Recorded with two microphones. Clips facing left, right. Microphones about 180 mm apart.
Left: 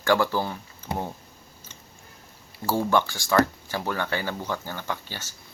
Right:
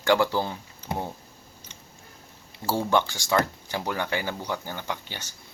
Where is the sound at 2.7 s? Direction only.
20° right (ahead or behind).